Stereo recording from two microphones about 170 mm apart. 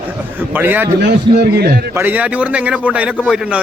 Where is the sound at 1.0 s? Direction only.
70° right (ahead or behind).